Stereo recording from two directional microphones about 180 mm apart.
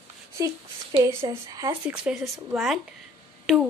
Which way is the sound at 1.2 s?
20° right (ahead or behind).